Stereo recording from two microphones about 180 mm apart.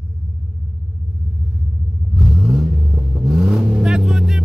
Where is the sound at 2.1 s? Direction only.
Centre (ahead or behind).